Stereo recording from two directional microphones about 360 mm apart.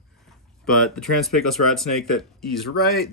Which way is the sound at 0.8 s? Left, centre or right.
Centre.